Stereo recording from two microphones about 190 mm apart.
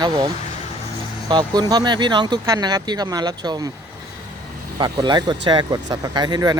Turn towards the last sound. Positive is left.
turn(degrees=-20)  # may be behind; listen again after turning